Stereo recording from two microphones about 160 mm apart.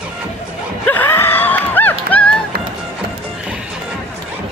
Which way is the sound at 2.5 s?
75° right (ahead or behind).